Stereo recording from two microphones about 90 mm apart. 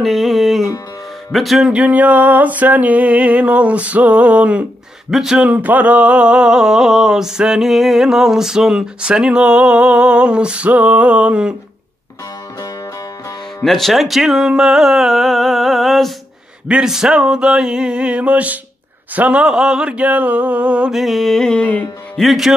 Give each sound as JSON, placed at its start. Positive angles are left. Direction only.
{"t": 0.0, "sound": "music", "side_deg": 0}
{"t": 1.7, "sound": "a sound", "side_deg": -15}
{"t": 13.7, "sound": "speech", "side_deg": 0}
{"t": 16.6, "sound": "a sound", "side_deg": -10}
{"t": 20.9, "sound": "music", "side_deg": 0}
{"t": 22.2, "sound": "music", "side_deg": 0}